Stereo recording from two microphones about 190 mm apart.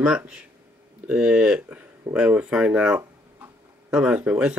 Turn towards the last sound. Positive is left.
turn(degrees=-5)  # may be behind; listen again after turning